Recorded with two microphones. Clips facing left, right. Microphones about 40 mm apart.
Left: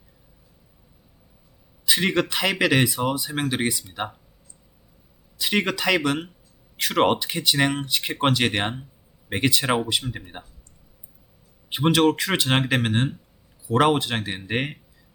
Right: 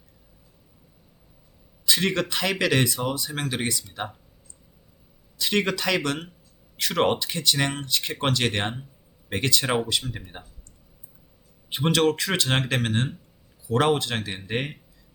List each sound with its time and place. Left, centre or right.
1.9 s a man's voice: centre
5.4 s speech: centre
11.7 s speech: centre